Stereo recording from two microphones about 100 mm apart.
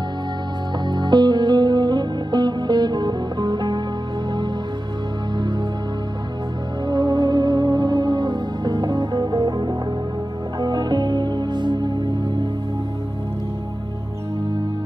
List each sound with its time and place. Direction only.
0.8 s music: 45° right (ahead or behind)
6.9 s music: 45° right (ahead or behind)